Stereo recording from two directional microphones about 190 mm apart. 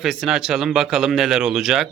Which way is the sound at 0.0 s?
Centre (ahead or behind).